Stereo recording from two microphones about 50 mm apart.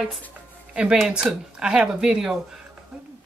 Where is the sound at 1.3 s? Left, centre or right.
Centre.